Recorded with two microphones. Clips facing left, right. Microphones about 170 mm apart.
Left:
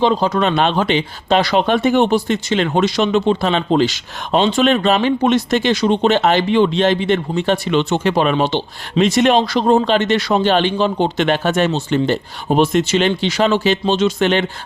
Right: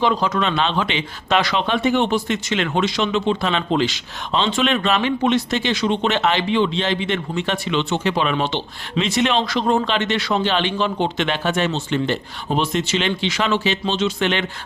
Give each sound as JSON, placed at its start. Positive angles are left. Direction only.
{"t": 0.0, "sound": "speech", "side_deg": 30}
{"t": 1.5, "sound": "speech", "side_deg": 45}